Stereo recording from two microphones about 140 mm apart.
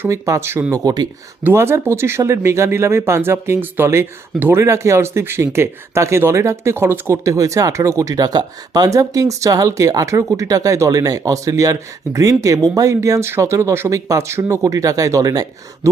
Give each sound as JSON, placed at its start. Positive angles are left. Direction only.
{"t": 0.0, "sound": "speech", "side_deg": -20}